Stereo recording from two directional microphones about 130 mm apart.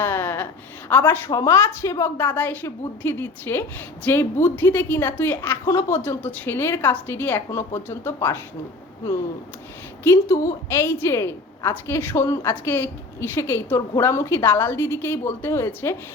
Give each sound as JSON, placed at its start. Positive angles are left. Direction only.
{"t": 0.0, "sound": "a sound", "side_deg": 15}
{"t": 0.9, "sound": "a woman's voice", "side_deg": 15}
{"t": 10.0, "sound": "a woman's voice", "side_deg": 20}